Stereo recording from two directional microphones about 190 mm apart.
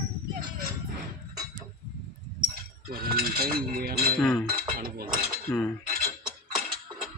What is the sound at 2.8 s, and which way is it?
Chink, 50° right (ahead or behind).